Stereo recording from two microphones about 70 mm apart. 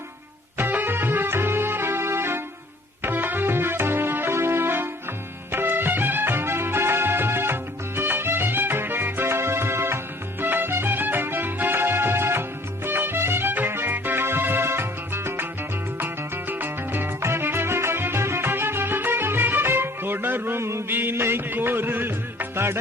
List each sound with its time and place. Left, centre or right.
0.5 s music: right